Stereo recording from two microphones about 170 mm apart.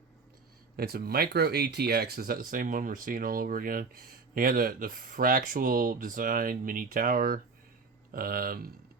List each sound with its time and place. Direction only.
0.8 s speech: 65° right (ahead or behind)